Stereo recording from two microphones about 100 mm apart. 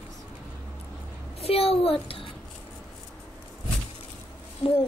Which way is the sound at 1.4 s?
70° left (ahead or behind).